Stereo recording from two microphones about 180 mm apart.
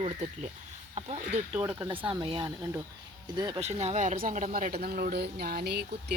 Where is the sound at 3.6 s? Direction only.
35° right (ahead or behind).